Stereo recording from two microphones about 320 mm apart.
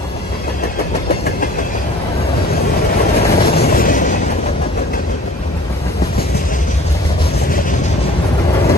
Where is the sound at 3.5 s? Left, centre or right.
Left.